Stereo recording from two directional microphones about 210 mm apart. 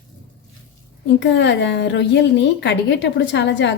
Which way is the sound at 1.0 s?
55° left (ahead or behind).